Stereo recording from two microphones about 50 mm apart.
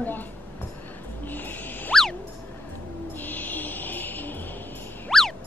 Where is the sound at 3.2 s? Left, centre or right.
Left.